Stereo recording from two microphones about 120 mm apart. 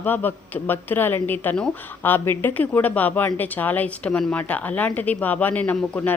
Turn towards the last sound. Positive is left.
turn(degrees=15)  # may be behind; listen again after turning